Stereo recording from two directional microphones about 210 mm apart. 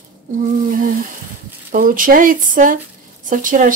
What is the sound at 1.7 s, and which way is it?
Speech, 40° right (ahead or behind).